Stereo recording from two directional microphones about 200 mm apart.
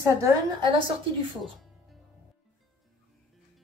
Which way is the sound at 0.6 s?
25° right (ahead or behind).